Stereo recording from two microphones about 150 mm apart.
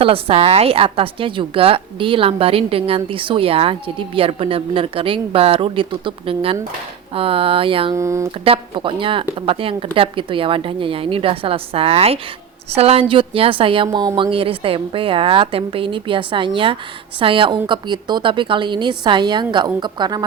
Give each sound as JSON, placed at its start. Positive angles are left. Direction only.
{"t": 0.0, "sound": "a woman's voice", "side_deg": -40}
{"t": 7.9, "sound": "speech", "side_deg": -20}
{"t": 8.4, "sound": "a woman's voice", "side_deg": -35}